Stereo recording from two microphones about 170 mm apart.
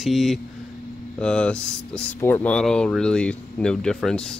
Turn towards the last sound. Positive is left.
turn(degrees=5)  # may be behind; listen again after turning